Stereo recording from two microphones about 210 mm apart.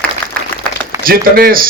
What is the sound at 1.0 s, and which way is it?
Speech, 45° right (ahead or behind).